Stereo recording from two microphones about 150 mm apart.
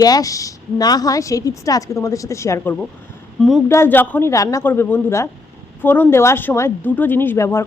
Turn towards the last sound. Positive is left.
turn(degrees=15)  # may be behind; listen again after turning